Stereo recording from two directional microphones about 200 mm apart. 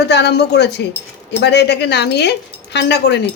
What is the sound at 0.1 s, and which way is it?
A woman's voice, 55° left (ahead or behind).